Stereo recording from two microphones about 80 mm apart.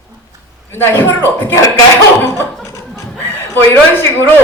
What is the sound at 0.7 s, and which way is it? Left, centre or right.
Speech, left.